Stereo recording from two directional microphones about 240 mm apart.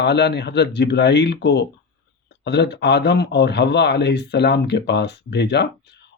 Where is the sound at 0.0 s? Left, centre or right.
Left.